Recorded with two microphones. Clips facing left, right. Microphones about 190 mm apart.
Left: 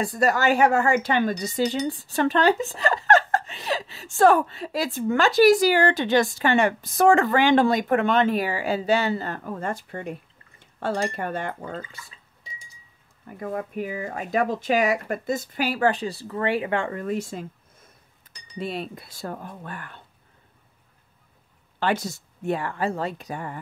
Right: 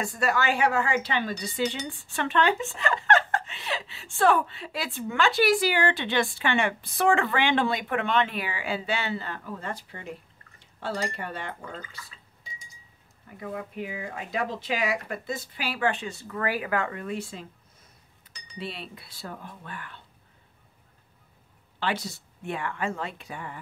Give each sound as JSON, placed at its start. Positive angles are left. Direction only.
{"t": 0.0, "sound": "a woman's voice", "side_deg": 35}
{"t": 13.3, "sound": "speech", "side_deg": 50}
{"t": 18.5, "sound": "speech", "side_deg": 45}
{"t": 21.7, "sound": "a woman's voice", "side_deg": 45}